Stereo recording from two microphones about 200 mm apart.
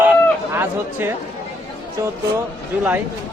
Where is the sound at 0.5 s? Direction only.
10° right (ahead or behind).